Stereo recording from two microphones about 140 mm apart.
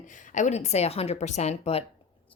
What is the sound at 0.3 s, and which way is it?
A woman's voice, 55° left (ahead or behind).